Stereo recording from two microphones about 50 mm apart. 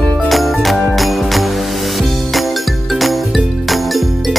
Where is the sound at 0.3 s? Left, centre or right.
Centre.